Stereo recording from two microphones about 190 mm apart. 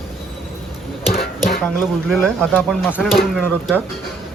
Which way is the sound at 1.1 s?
50° left (ahead or behind).